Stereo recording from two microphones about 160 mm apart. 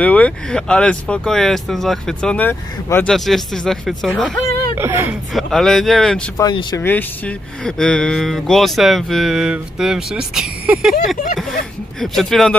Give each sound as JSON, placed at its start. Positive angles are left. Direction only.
{"t": 0.0, "sound": "speech", "side_deg": 10}
{"t": 4.7, "sound": "speech", "side_deg": -15}
{"t": 5.3, "sound": "speech", "side_deg": 0}
{"t": 6.3, "sound": "speech", "side_deg": 25}
{"t": 6.8, "sound": "speech", "side_deg": 10}